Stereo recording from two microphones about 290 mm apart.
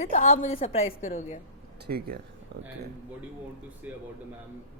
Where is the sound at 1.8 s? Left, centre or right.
Right.